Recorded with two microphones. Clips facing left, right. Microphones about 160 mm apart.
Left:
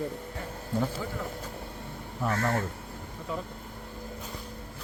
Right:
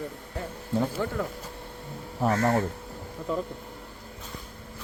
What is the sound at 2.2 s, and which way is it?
Speech, 35° right (ahead or behind).